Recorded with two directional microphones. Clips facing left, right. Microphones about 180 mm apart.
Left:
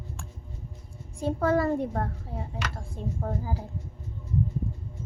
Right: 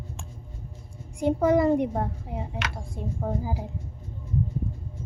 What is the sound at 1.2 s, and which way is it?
A child's voice, 15° right (ahead or behind).